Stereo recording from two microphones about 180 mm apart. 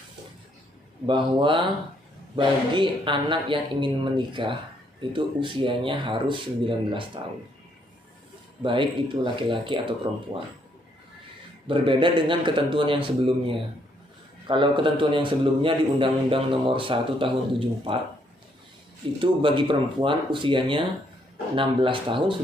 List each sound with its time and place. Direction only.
1.0 s a man's voice: 25° right (ahead or behind)
8.6 s a man's voice: 30° right (ahead or behind)
11.7 s a man's voice: 30° right (ahead or behind)
19.2 s a man's voice: 30° right (ahead or behind)